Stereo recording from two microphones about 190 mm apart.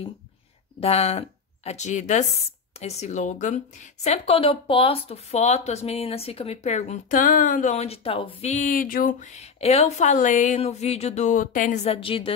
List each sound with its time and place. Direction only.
0.7 s a woman's voice: 35° left (ahead or behind)